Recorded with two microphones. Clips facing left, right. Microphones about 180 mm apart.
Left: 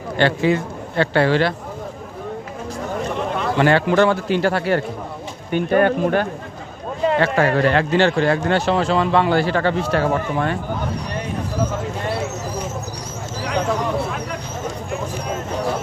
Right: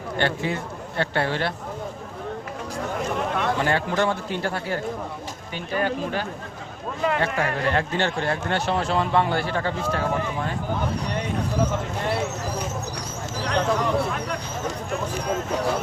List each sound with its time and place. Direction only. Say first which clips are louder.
0.2 s speech: left 8 dB; 90° left
3.2 s a sound: left 1 dB; centre (ahead or behind)
3.6 s speech: left 12 dB; 85° left
5.5 s speech: left 10 dB; 55° left (ahead or behind)
7.2 s speech: left 8 dB; 90° left; by 10.6 s 75° left (ahead or behind)
13.4 s a sound: left 2 dB; 5° left (ahead or behind)